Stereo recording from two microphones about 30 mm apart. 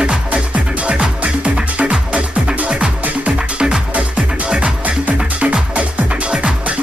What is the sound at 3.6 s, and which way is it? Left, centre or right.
Music, right.